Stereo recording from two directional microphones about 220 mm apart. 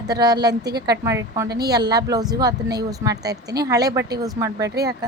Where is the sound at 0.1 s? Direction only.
20° right (ahead or behind).